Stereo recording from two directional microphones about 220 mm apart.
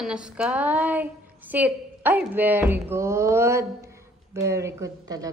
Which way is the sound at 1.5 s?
10° right (ahead or behind).